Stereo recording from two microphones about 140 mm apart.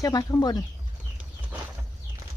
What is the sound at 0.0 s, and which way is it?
Speech, 25° left (ahead or behind).